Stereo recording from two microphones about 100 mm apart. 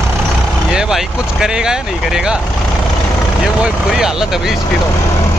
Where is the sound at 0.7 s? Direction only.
5° right (ahead or behind).